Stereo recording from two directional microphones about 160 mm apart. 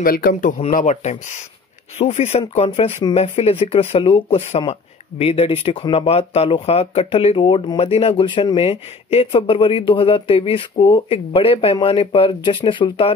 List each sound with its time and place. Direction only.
0.0 s speech: 65° left (ahead or behind); by 13.1 s 30° left (ahead or behind)